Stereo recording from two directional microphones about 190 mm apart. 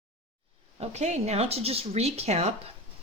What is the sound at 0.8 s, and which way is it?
Speech, 35° right (ahead or behind).